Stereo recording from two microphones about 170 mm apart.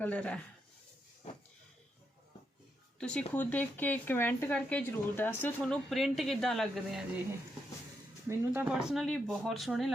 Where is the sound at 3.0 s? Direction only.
5° left (ahead or behind).